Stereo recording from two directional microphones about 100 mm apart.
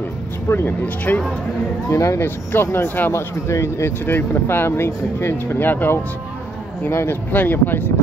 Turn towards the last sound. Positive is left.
turn(degrees=20)  # may be behind; listen again after turning